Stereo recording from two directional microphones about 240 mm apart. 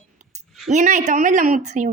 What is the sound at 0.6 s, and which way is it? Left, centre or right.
A woman's voice, right.